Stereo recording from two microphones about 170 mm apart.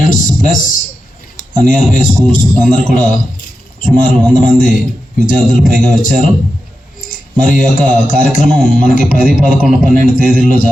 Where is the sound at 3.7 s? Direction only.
50° left (ahead or behind).